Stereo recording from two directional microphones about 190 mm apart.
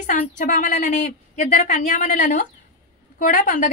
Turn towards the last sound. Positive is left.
turn(degrees=45)  # may be behind; listen again after turning